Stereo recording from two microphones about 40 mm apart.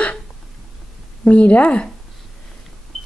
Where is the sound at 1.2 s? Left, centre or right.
Left.